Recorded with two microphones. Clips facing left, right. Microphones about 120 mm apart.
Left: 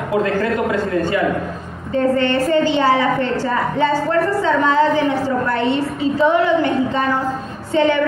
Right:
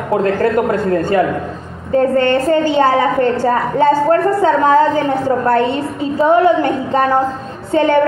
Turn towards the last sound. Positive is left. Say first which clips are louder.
# right 3 dB
turn(degrees=-45)  # may be behind; listen again after turning